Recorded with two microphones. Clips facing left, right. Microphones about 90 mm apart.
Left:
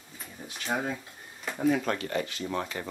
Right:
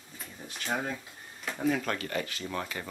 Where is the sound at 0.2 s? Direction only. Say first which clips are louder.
Left 1 dB; centre (ahead or behind).